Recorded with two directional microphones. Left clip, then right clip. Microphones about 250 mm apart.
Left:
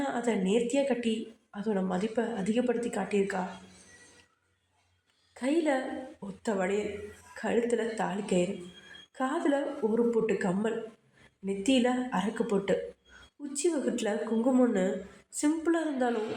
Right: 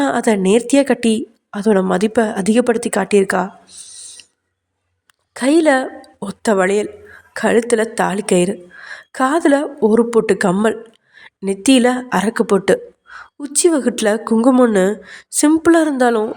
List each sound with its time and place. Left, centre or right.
0.0 s a woman's voice: right
5.3 s a woman's voice: right